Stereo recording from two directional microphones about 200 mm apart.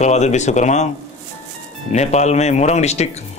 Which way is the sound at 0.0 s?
35° left (ahead or behind).